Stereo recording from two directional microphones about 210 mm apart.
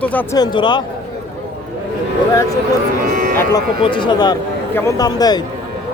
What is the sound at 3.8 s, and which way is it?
Speech, 25° left (ahead or behind).